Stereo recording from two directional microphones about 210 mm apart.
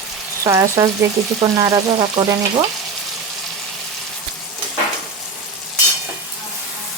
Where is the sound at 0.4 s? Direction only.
15° right (ahead or behind).